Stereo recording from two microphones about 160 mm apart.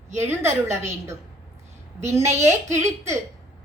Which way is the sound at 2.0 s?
15° right (ahead or behind).